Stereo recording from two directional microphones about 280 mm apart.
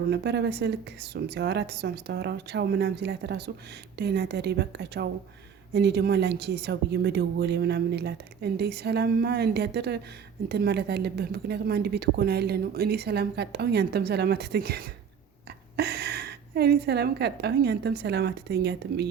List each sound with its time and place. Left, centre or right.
0.1 s a woman's voice: right